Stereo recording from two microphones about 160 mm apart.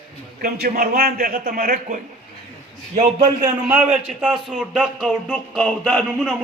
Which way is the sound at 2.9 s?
40° right (ahead or behind).